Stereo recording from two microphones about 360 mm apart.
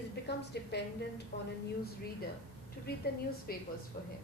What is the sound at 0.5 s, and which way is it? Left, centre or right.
Speech, left.